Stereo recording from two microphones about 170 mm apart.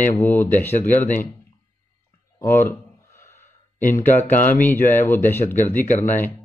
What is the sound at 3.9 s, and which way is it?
Speech, 10° left (ahead or behind).